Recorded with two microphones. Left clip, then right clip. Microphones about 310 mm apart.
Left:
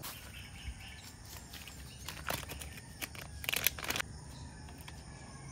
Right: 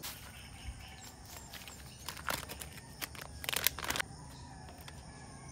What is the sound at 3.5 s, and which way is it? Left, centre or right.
Scissors, centre.